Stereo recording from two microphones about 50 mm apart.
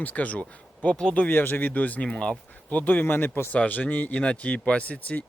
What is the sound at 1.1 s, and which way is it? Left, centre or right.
Speech, left.